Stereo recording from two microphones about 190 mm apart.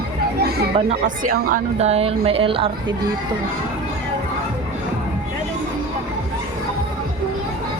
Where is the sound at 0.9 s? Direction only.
45° right (ahead or behind).